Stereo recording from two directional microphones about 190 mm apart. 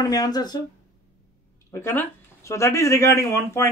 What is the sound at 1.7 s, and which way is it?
Speech, 15° left (ahead or behind).